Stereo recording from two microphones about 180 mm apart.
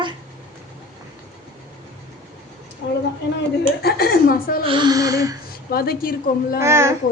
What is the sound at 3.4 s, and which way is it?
A woman's voice, 60° left (ahead or behind).